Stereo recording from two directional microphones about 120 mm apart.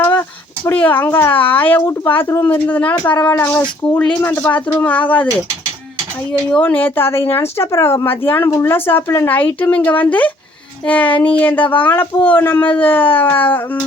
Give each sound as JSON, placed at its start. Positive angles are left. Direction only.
{"t": 0.0, "sound": "a sound", "side_deg": 20}
{"t": 0.7, "sound": "speech", "side_deg": 15}
{"t": 6.5, "sound": "speech", "side_deg": 15}